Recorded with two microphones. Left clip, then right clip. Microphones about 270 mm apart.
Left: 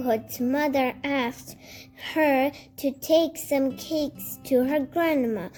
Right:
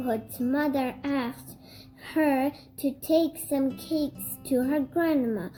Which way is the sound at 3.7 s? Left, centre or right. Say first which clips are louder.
Left 2 dB; left.